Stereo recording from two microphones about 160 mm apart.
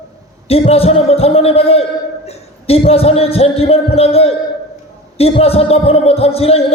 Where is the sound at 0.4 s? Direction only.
40° left (ahead or behind).